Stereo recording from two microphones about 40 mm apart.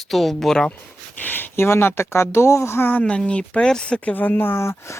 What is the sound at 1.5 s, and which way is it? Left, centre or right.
Speech, left.